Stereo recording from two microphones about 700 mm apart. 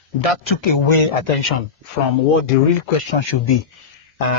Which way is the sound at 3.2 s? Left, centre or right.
Left.